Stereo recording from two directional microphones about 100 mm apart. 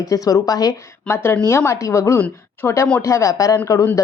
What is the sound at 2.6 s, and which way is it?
Speech, 20° left (ahead or behind).